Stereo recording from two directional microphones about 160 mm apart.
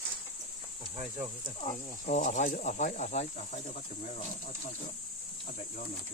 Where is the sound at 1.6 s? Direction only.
50° left (ahead or behind).